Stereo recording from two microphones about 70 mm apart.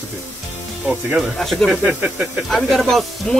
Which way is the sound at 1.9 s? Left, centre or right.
Centre.